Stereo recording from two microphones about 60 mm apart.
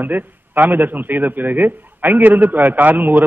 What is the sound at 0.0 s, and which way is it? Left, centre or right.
A man's voice, right.